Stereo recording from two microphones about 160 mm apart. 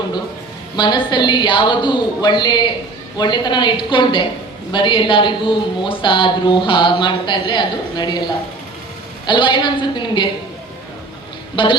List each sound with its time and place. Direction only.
0.8 s speech: 30° left (ahead or behind)
9.2 s speech: 30° left (ahead or behind)
11.5 s a man's voice: 30° left (ahead or behind)